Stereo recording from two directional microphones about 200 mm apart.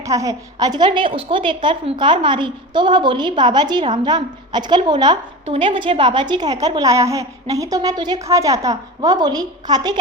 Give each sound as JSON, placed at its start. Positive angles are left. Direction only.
{"t": 0.0, "sound": "a woman's voice", "side_deg": -15}